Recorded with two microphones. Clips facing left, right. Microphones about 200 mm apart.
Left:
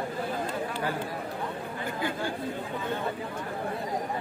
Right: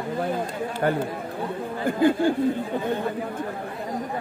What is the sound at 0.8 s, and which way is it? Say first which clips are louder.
Speech: right 7 dB; 55° right (ahead or behind).